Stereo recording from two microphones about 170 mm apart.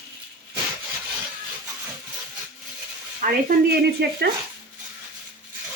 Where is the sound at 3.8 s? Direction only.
80° right.